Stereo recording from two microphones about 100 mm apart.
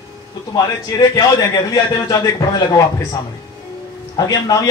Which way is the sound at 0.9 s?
40° left (ahead or behind).